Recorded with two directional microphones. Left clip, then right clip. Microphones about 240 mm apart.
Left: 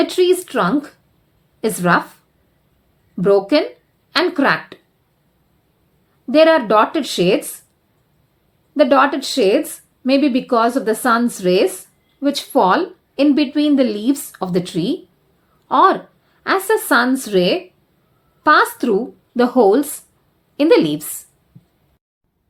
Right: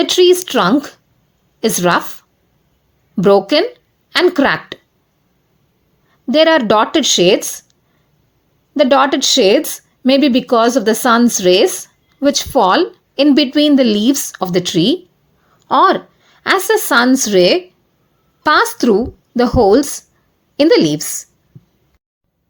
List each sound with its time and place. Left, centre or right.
0.0 s speech: right
3.2 s speech: right
6.2 s speech: right
8.7 s a woman's voice: right